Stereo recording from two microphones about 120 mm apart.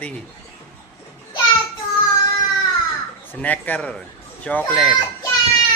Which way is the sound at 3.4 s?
15° left (ahead or behind).